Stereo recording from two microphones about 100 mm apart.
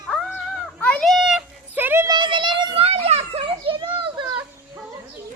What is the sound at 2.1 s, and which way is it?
Children playing, 55° right (ahead or behind).